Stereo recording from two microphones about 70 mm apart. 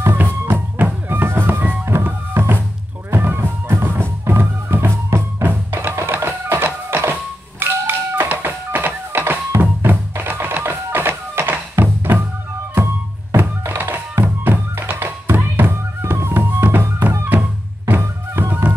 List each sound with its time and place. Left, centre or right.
0.0 s music: right